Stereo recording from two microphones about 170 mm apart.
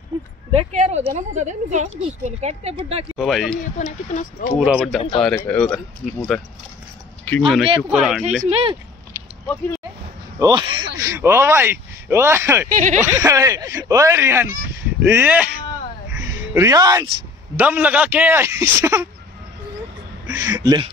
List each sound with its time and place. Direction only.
0.5 s a woman's voice: 40° right (ahead or behind)
3.2 s speech: centre (ahead or behind)
3.7 s speech: 50° left (ahead or behind)
4.6 s speech: 5° right (ahead or behind)
8.5 s a woman's voice: 35° right (ahead or behind)
10.4 s speech: 25° right (ahead or behind)
11.0 s speech: 15° right (ahead or behind)
12.6 s speech: 45° right (ahead or behind)
13.0 s speech: 15° right (ahead or behind)
16.2 s music: 15° right (ahead or behind)
17.6 s speech: 10° right (ahead or behind)
20.2 s speech: 15° right (ahead or behind)